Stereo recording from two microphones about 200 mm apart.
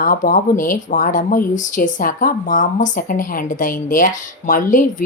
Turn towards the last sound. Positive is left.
turn(degrees=40)  # may be behind; listen again after turning